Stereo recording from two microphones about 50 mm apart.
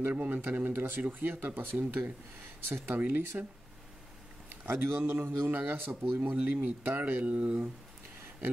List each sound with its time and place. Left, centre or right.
0.0 s speech: right
4.6 s speech: right
7.0 s speech: right